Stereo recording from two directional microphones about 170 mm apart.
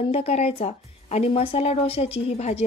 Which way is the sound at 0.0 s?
35° left (ahead or behind).